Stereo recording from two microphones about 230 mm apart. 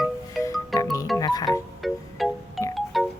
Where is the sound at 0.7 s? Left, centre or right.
Centre.